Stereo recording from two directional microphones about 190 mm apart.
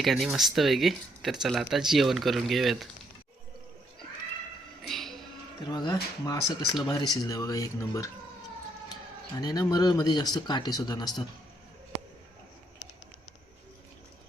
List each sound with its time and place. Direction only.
0.0 s speech: centre (ahead or behind)
4.8 s a sound: centre (ahead or behind)
5.7 s speech: 20° left (ahead or behind)
9.4 s speech: 20° left (ahead or behind)